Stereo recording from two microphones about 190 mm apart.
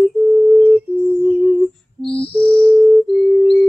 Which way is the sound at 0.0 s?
5° left (ahead or behind).